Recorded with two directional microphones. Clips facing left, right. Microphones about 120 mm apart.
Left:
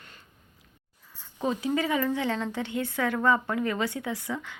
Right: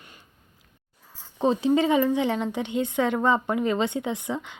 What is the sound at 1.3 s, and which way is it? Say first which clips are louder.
A woman's voice: right 6 dB; 30° right (ahead or behind).